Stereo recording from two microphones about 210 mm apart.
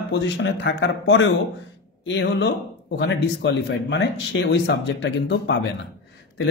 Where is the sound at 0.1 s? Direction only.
60° left (ahead or behind).